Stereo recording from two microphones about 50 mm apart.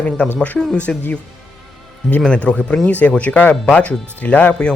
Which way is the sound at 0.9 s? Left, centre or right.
Centre.